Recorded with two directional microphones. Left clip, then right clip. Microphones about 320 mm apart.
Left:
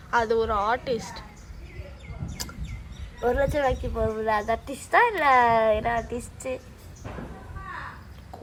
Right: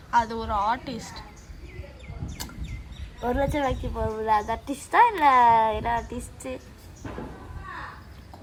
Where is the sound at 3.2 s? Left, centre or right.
Left.